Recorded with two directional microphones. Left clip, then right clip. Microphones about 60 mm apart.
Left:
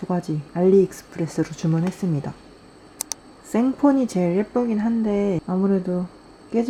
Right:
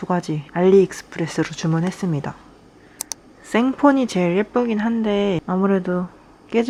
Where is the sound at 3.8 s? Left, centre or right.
Centre.